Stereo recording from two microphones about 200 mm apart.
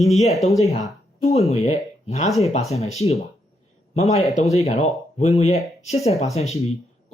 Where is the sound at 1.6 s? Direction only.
35° left (ahead or behind).